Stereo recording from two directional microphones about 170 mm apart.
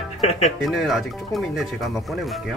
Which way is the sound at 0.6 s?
Centre (ahead or behind).